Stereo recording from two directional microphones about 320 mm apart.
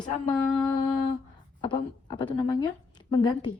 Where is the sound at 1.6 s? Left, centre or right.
Centre.